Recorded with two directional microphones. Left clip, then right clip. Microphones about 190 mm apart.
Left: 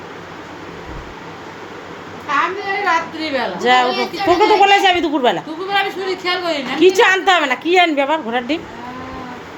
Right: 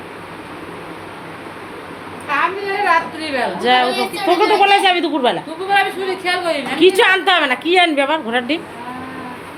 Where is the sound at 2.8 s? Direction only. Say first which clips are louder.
Right 3 dB; 55° left (ahead or behind).